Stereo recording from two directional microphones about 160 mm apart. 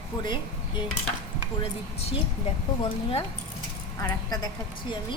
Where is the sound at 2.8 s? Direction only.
35° left (ahead or behind).